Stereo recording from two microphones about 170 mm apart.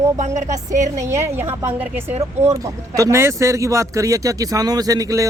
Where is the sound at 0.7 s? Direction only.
45° right (ahead or behind).